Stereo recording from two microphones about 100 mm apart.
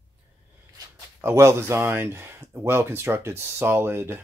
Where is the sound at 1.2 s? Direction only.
30° right (ahead or behind).